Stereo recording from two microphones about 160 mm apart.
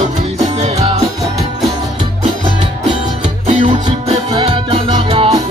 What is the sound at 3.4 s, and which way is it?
Music, 40° right (ahead or behind).